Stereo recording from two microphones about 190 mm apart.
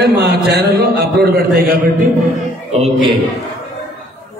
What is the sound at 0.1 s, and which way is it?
A man's voice, 60° right (ahead or behind).